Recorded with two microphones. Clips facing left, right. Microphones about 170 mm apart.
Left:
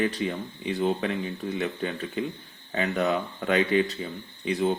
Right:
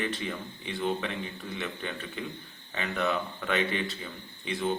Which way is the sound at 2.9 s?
40° left (ahead or behind).